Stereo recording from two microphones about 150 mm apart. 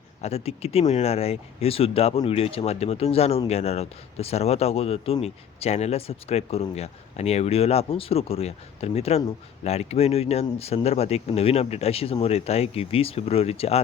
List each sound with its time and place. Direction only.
0.2 s speech: 45° left (ahead or behind)